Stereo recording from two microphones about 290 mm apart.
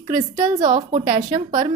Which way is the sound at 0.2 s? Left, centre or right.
Centre.